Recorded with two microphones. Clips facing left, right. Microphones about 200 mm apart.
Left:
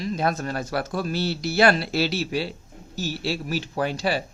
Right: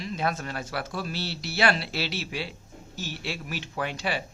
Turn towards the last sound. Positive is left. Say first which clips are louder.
# left 6 dB
turn(degrees=35)  # may be behind; listen again after turning